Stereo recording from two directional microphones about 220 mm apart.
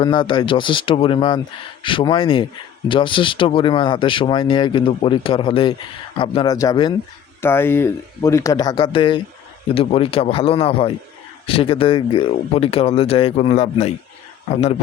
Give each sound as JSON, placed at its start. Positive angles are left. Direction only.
{"t": 0.0, "sound": "speech", "side_deg": 20}